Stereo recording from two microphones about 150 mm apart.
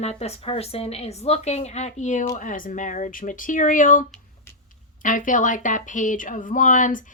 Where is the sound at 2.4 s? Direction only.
60° left (ahead or behind).